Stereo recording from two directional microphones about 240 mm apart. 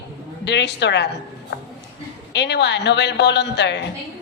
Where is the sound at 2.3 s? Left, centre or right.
Left.